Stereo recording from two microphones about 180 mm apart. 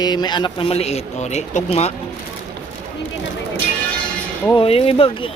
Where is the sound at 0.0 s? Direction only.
25° left (ahead or behind).